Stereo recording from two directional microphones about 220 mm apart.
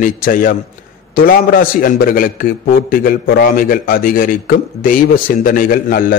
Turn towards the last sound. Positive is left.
turn(degrees=40)  # may be behind; listen again after turning